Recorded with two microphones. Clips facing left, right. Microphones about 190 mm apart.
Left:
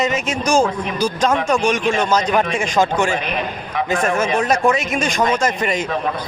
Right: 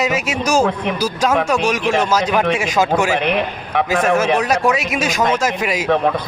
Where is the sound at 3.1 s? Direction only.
65° right (ahead or behind).